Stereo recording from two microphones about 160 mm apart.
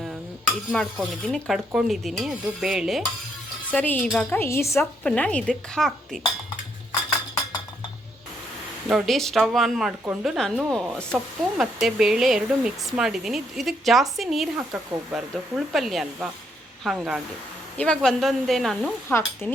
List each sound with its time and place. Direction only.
0.0 s speech: centre (ahead or behind)
3.7 s a woman's voice: 10° left (ahead or behind)
4.4 s a woman's voice: 15° left (ahead or behind)
8.9 s speech: centre (ahead or behind)
19.0 s a woman's voice: 15° left (ahead or behind)